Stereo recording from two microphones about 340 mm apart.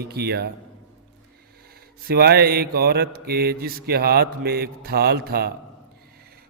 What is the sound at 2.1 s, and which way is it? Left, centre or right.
Mantra, right.